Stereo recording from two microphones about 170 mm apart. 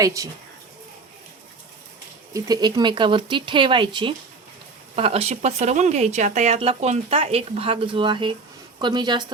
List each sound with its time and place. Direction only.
0.0 s speech: 20° right (ahead or behind)
2.3 s speech: 25° right (ahead or behind)